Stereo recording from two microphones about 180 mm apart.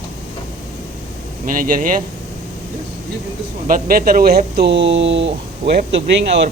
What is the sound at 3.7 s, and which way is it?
Speech, 50° right (ahead or behind).